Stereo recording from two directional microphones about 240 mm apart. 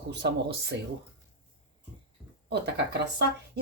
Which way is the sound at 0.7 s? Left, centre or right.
Right.